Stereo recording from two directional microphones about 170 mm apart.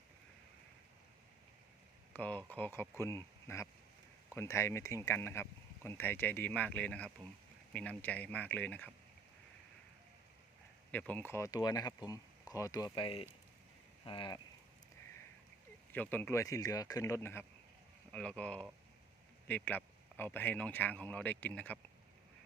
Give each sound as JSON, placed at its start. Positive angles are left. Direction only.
{"t": 2.1, "sound": "speech", "side_deg": 10}
{"t": 10.9, "sound": "speech", "side_deg": 10}
{"t": 15.9, "sound": "speech", "side_deg": 10}